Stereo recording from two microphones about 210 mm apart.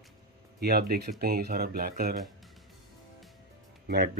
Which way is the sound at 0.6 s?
45° right (ahead or behind).